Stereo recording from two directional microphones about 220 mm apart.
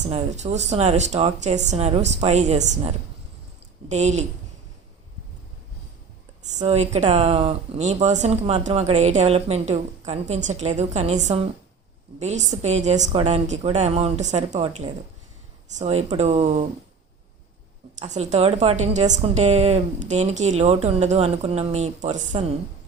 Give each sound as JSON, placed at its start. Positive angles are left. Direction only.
{"t": 0.0, "sound": "speech", "side_deg": -30}
{"t": 6.6, "sound": "speech", "side_deg": -30}
{"t": 18.0, "sound": "a woman's voice", "side_deg": -30}